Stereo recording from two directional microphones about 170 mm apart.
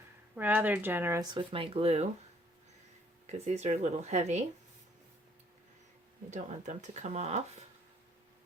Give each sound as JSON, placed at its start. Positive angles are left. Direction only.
{"t": 0.3, "sound": "speech", "side_deg": -10}
{"t": 1.3, "sound": "speech", "side_deg": -30}
{"t": 3.2, "sound": "speech", "side_deg": -40}
{"t": 6.3, "sound": "speech", "side_deg": -45}